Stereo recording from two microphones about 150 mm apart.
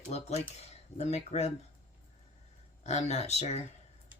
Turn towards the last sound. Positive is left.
turn(degrees=45)  # may be behind; listen again after turning